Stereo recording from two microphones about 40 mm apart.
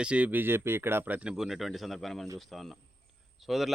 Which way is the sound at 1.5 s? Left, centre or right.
Centre.